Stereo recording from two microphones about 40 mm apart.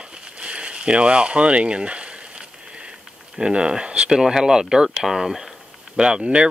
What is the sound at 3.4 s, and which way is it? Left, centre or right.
Speech, right.